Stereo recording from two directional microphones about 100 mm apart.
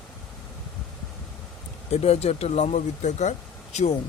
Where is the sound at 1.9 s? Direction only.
90° left.